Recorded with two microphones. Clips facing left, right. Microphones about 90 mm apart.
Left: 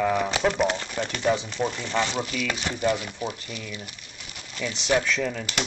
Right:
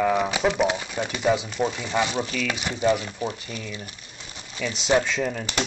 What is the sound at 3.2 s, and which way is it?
Speech, 30° right (ahead or behind).